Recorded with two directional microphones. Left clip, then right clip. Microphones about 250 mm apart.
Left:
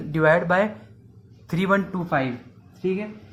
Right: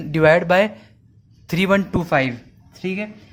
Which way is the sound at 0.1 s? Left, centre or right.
Right.